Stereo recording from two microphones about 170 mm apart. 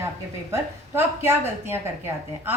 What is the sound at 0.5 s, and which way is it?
Speech, 15° right (ahead or behind).